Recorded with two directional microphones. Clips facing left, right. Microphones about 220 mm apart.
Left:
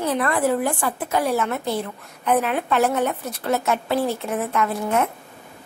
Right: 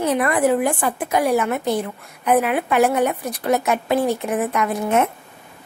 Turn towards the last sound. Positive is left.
turn(degrees=-20)  # may be behind; listen again after turning